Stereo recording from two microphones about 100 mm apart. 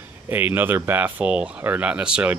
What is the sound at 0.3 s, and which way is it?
Speech, 20° right (ahead or behind).